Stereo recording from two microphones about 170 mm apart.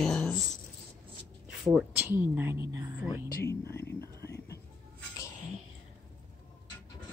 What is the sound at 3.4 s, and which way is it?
Speech, 15° left (ahead or behind).